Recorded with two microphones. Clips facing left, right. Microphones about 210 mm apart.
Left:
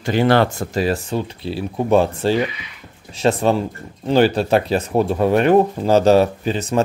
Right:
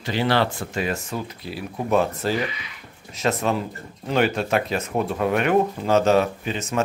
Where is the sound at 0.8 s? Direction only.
35° left (ahead or behind).